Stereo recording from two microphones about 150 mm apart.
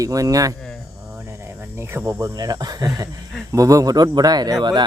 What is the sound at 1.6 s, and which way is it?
Speech, 15° right (ahead or behind).